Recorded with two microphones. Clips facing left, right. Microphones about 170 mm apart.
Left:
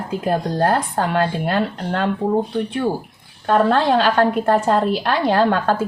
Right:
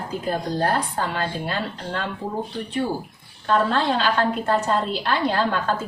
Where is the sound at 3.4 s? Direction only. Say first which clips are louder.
Left 5 dB; 50° left (ahead or behind).